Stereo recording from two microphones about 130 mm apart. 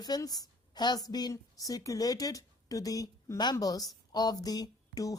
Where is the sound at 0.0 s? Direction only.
30° left (ahead or behind).